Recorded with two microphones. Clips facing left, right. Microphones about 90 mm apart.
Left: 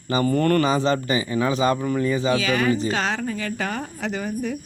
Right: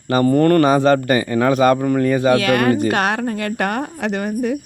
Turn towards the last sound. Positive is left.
turn(degrees=-60)  # may be behind; listen again after turning